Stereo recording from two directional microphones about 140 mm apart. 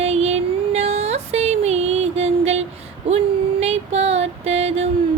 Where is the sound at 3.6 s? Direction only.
50° right (ahead or behind).